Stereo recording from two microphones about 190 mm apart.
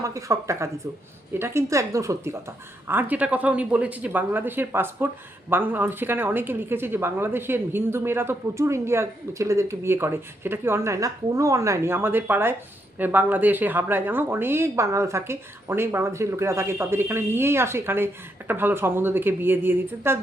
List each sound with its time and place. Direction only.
0.0 s speech: 15° right (ahead or behind)